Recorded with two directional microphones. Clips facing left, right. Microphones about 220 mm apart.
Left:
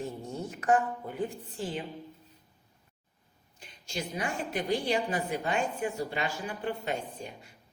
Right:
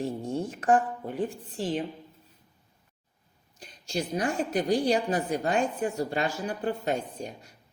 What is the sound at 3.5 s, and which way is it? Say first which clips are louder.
A woman's voice: right 6 dB; 35° right (ahead or behind).